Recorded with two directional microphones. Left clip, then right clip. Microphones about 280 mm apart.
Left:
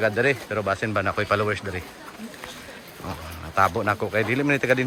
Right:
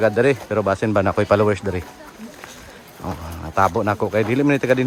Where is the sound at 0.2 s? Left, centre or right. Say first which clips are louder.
Right 5 dB; centre.